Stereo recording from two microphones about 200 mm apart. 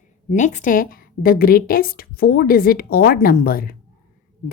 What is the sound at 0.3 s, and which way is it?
A woman's voice, 35° left (ahead or behind).